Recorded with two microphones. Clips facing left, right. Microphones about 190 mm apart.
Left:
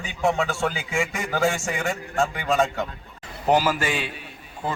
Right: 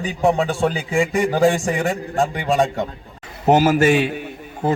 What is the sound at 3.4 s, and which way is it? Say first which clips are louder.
Speech: right 7 dB; 45° right (ahead or behind).